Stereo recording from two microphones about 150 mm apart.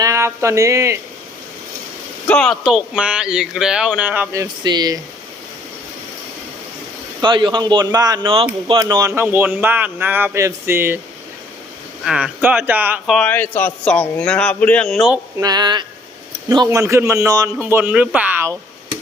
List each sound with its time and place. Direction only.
0.0 s speech: 20° right (ahead or behind)
2.2 s speech: 5° left (ahead or behind); by 4.9 s 30° right (ahead or behind)
7.2 s speech: 35° right (ahead or behind); by 11.0 s 15° right (ahead or behind)
12.0 s speech: 5° right (ahead or behind)
13.1 s a man's voice: 5° left (ahead or behind)
15.4 s speech: 25° right (ahead or behind)